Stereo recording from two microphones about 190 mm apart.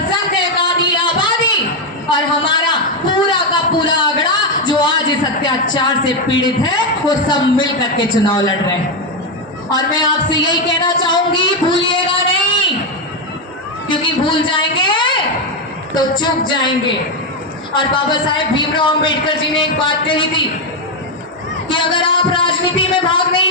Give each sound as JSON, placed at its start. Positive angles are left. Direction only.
{"t": 0.1, "sound": "a sound", "side_deg": 25}
{"t": 5.7, "sound": "a man's voice", "side_deg": 25}
{"t": 9.7, "sound": "a man's voice", "side_deg": 25}
{"t": 13.8, "sound": "a woman's voice", "side_deg": 25}
{"t": 17.7, "sound": "a man's voice", "side_deg": 25}
{"t": 21.7, "sound": "a sound", "side_deg": 25}